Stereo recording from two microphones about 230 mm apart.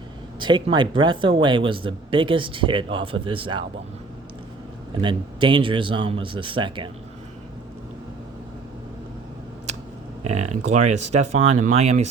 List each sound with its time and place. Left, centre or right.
0.3 s speech: centre
4.9 s speech: right
10.2 s speech: right